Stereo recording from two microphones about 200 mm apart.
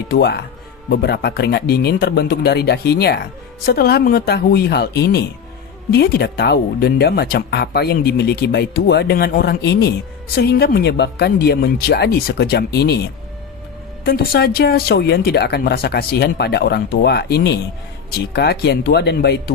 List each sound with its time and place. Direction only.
0.1 s speech: 55° left (ahead or behind)